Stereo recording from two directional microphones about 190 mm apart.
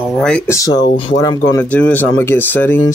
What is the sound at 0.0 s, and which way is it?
Speech, centre (ahead or behind).